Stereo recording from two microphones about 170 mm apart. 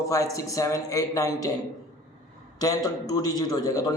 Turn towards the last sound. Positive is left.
turn(degrees=20)  # may be behind; listen again after turning